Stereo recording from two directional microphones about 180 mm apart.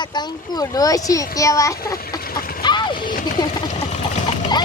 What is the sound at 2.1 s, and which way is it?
Chicken, 55° left (ahead or behind).